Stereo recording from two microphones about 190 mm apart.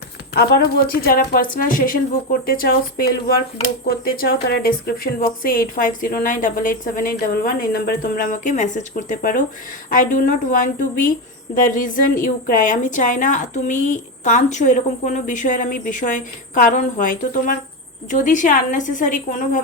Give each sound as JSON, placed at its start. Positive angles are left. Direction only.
{"t": 0.3, "sound": "a woman's voice", "side_deg": 55}